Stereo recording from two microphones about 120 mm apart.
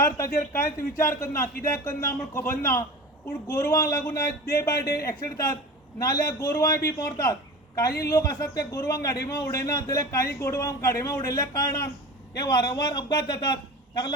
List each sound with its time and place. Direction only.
0.0 s a man's voice: 25° left (ahead or behind)